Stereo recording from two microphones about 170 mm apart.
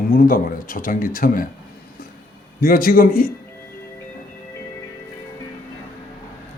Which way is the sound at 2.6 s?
60° left (ahead or behind).